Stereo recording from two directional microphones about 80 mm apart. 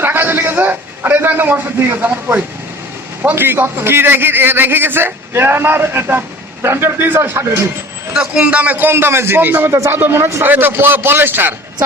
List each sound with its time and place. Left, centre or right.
0.0 s a man's voice: right
8.1 s a man's voice: centre; by 10.4 s right
10.4 s a man's voice: right